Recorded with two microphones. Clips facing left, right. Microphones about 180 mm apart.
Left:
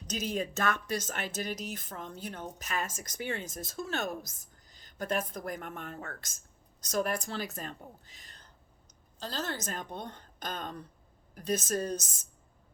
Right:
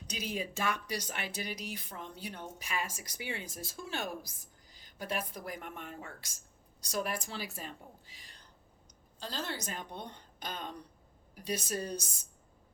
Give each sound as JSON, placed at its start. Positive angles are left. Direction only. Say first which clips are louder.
{"t": 0.3, "sound": "a woman's voice", "louder": "left 3 dB", "side_deg": -10}
{"t": 0.9, "sound": "a woman's voice", "louder": "left 4 dB", "side_deg": 45}
{"t": 2.7, "sound": "a woman's voice", "louder": "left 2 dB", "side_deg": -10}
{"t": 8.0, "sound": "whispering", "louder": "left 1 dB", "side_deg": -10}
{"t": 9.2, "sound": "a woman's voice", "louder": "left 3 dB", "side_deg": 45}